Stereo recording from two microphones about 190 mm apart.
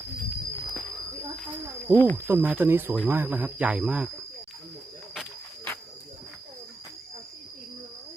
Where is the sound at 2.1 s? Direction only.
10° right (ahead or behind).